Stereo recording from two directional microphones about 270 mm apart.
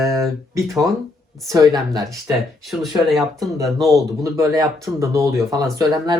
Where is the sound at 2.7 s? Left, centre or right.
Centre.